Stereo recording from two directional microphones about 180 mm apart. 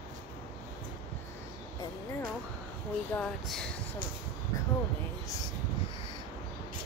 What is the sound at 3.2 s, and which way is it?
Speech, 5° left (ahead or behind).